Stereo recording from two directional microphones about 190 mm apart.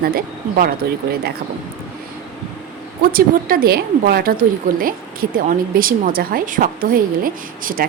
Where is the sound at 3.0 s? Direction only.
50° right (ahead or behind).